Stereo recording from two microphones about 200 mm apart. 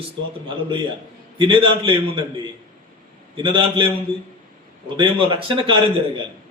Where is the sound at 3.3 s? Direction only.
25° right (ahead or behind).